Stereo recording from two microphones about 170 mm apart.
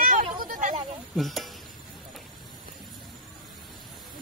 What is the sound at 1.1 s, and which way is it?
Stir, centre (ahead or behind).